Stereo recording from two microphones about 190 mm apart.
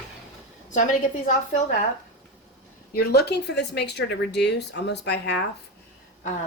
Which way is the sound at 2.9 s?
55° left (ahead or behind).